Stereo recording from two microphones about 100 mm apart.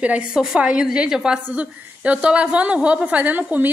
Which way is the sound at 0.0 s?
10° right (ahead or behind).